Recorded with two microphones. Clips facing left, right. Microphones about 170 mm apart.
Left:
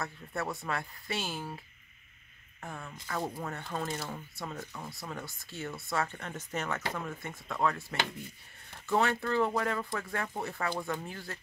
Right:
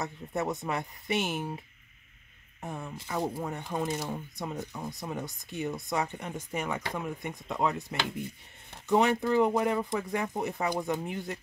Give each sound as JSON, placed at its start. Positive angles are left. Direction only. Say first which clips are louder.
{"t": 0.0, "sound": "speech", "louder": "right 4 dB", "side_deg": -20}
{"t": 2.6, "sound": "speech", "louder": "right 5 dB", "side_deg": -15}